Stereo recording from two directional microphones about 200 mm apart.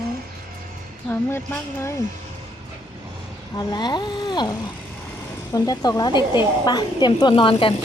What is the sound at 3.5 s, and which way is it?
A child's voice, 20° left (ahead or behind).